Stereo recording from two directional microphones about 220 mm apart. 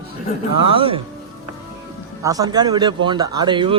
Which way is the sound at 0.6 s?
25° right (ahead or behind).